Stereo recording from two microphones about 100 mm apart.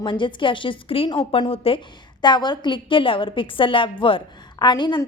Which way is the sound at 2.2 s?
50° left (ahead or behind).